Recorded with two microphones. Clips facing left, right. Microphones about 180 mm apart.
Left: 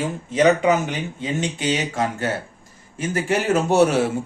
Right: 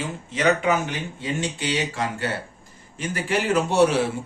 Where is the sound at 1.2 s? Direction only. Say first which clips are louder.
Left 2 dB; 20° left (ahead or behind).